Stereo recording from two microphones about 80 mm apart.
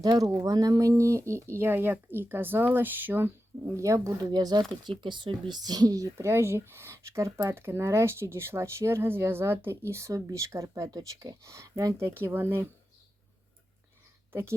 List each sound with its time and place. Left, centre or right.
0.0 s speech: right
4.3 s speech: right
4.9 s speech: right
6.1 s speech: right
12.2 s speech: right